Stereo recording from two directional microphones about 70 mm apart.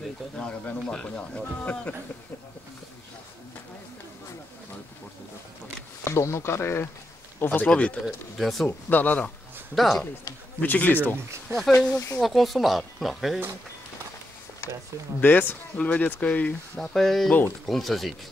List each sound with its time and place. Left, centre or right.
0.4 s speech: centre
6.0 s speech: left
7.4 s speech: centre
8.0 s speech: centre
8.6 s speech: left
9.8 s speech: centre
10.6 s speech: left
11.5 s speech: right
11.9 s speech: left
12.2 s speech: centre
15.1 s speech: left
16.8 s speech: centre